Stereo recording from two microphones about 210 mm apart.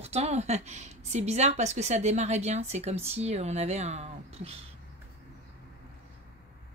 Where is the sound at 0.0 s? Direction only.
30° right (ahead or behind).